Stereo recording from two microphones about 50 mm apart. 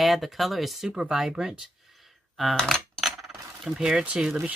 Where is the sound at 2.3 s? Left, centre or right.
Centre.